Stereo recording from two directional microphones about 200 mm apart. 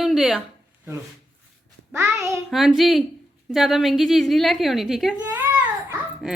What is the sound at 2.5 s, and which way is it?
A woman's voice, centre (ahead or behind).